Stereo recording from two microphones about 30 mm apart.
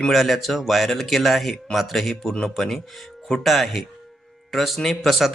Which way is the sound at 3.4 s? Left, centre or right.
Centre.